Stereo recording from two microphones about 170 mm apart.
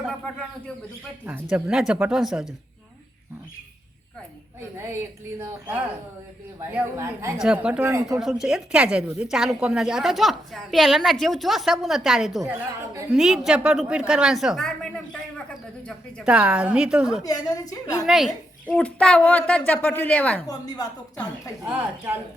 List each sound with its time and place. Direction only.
1.2 s a woman's voice: 10° right (ahead or behind)
6.6 s a woman's voice: 10° right (ahead or behind)
7.3 s a woman's voice: 5° right (ahead or behind)
8.2 s a woman's voice: 5° right (ahead or behind)
16.2 s a woman's voice: 5° right (ahead or behind)
17.2 s a woman's voice: 20° left (ahead or behind)
18.0 s a woman's voice: centre (ahead or behind)
20.5 s a woman's voice: 20° left (ahead or behind)
21.6 s a woman's voice: 10° right (ahead or behind)